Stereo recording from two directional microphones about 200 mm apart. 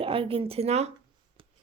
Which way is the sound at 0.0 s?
25° right (ahead or behind).